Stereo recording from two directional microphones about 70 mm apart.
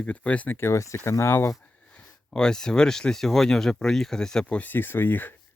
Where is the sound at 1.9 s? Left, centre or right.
Centre.